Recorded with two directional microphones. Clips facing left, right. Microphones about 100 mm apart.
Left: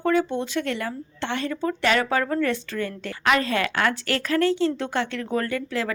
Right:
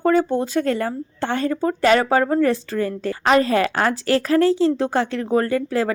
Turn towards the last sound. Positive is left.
turn(degrees=-30)  # may be behind; listen again after turning